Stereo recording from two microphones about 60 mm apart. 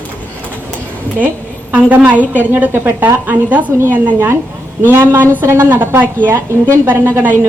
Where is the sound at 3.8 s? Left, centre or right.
Right.